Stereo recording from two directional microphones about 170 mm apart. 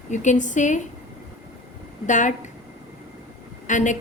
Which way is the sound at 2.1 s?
45° left (ahead or behind).